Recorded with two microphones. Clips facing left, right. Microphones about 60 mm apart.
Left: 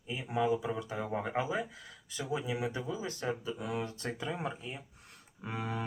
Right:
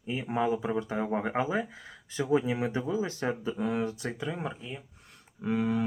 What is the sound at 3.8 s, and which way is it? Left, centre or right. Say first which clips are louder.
Speech: right 7 dB; right.